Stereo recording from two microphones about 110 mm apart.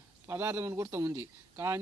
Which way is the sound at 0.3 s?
20° right (ahead or behind).